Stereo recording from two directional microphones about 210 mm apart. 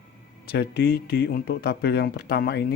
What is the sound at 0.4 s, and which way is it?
Speech, 50° left (ahead or behind).